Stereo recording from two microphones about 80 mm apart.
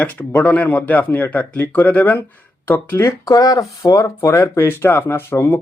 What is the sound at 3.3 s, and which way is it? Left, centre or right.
Speech, left.